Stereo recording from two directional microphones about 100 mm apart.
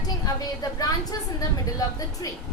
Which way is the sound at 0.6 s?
40° left (ahead or behind).